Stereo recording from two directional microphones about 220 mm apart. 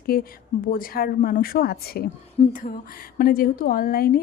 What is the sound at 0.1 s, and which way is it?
A woman's voice, 45° left (ahead or behind).